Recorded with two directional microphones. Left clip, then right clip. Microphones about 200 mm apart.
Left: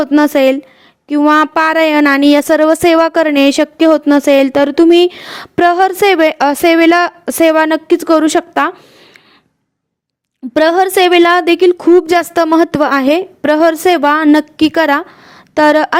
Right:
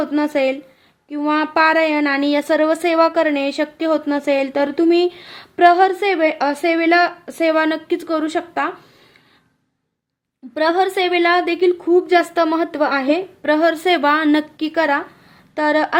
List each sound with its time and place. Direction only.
0.2 s speech: 50° left (ahead or behind)
10.5 s a woman's voice: 45° left (ahead or behind)